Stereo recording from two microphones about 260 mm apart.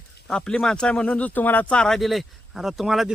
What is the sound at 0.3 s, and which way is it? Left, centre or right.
Speech, centre.